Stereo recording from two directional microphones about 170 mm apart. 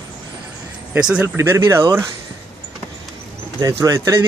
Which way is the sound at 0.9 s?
5° right (ahead or behind).